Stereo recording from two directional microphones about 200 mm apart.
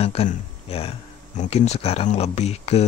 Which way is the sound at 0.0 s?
30° left (ahead or behind).